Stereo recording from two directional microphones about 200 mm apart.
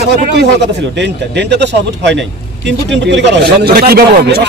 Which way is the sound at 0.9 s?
60° right (ahead or behind).